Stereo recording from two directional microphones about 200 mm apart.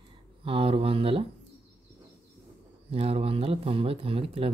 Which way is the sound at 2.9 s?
30° right (ahead or behind).